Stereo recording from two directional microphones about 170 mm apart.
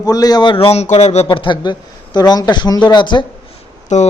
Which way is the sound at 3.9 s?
45° left (ahead or behind).